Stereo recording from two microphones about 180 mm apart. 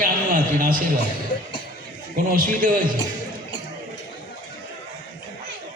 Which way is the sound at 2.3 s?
50° right (ahead or behind).